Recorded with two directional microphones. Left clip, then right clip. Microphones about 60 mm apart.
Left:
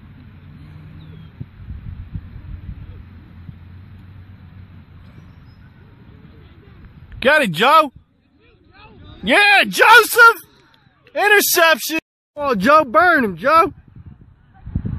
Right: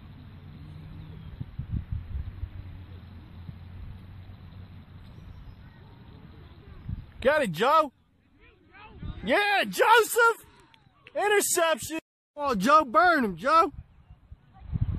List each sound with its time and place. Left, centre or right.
7.2 s speech: left
8.7 s a sound: centre
9.2 s speech: left
12.4 s speech: left